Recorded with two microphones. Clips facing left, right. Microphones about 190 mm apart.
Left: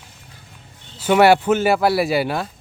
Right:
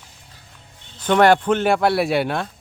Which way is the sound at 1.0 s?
5° left (ahead or behind).